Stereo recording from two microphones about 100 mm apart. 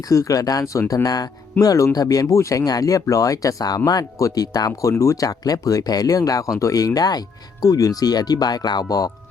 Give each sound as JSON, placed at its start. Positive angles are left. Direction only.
{"t": 0.1, "sound": "speech", "side_deg": 35}